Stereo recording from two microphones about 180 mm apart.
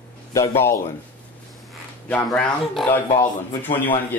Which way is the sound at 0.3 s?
15° left (ahead or behind).